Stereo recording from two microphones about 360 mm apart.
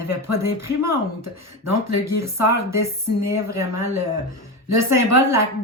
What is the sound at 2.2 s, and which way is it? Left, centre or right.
Speech, centre.